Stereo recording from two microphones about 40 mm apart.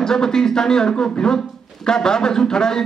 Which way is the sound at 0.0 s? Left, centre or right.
Centre.